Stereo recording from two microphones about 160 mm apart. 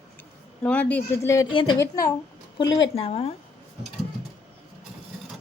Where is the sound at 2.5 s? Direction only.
30° left (ahead or behind).